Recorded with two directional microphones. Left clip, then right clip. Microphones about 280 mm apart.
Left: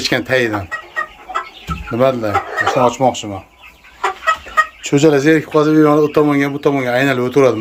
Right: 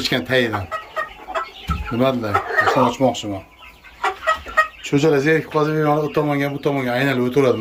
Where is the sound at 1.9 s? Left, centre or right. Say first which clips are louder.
Left 5 dB; centre.